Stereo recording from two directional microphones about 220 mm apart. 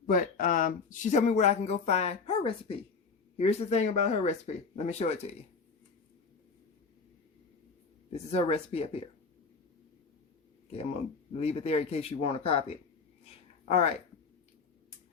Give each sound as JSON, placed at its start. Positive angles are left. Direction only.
{"t": 0.1, "sound": "speech", "side_deg": 35}
{"t": 8.1, "sound": "speech", "side_deg": 30}
{"t": 10.7, "sound": "speech", "side_deg": 25}